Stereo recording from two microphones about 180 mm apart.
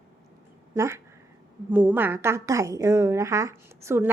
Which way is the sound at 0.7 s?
15° right (ahead or behind).